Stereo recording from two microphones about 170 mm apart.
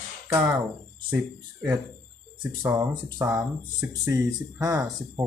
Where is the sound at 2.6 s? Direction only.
25° right (ahead or behind).